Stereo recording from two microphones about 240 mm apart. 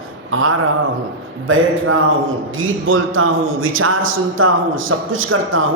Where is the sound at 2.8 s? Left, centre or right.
Right.